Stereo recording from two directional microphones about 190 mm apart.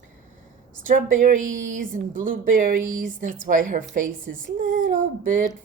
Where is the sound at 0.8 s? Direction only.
45° right (ahead or behind).